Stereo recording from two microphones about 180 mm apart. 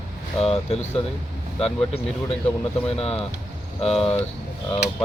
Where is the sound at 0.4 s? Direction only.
35° left (ahead or behind).